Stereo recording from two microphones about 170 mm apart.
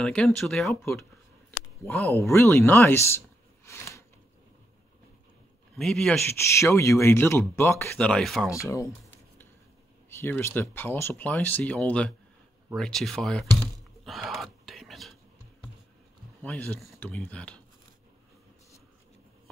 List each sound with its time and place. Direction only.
0.0 s speech: 5° left (ahead or behind)
1.8 s speech: 20° left (ahead or behind)
5.8 s speech: centre (ahead or behind)
6.2 s speech: 15° left (ahead or behind)
8.6 s speech: 20° left (ahead or behind)
10.0 s speech: 15° left (ahead or behind)
14.0 s a sound: centre (ahead or behind)
16.4 s speech: 10° left (ahead or behind)